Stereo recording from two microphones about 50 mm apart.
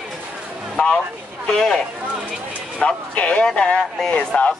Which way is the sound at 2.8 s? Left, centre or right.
Centre.